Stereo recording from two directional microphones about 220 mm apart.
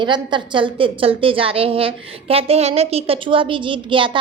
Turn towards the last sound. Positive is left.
turn(degrees=-20)  # may be behind; listen again after turning